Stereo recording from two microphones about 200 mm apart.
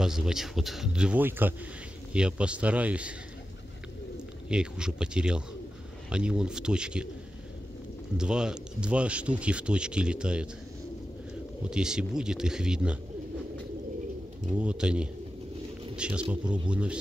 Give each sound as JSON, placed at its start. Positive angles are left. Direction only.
{"t": 0.0, "sound": "speech", "side_deg": 0}
{"t": 4.5, "sound": "speech", "side_deg": -5}
{"t": 8.2, "sound": "speech", "side_deg": -5}
{"t": 11.7, "sound": "speech", "side_deg": -5}
{"t": 14.5, "sound": "speech", "side_deg": -5}